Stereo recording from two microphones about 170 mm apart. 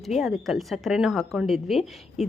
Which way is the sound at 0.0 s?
Centre (ahead or behind).